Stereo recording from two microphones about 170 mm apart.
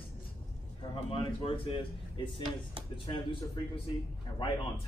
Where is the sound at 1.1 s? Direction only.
35° left (ahead or behind).